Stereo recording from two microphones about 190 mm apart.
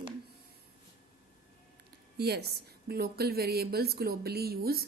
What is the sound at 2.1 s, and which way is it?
A woman's voice, 60° right (ahead or behind).